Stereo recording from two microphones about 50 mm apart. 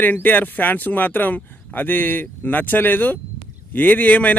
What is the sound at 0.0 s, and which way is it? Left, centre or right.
Speech, left.